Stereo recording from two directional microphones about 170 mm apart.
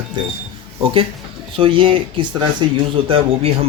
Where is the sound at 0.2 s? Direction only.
30° right (ahead or behind).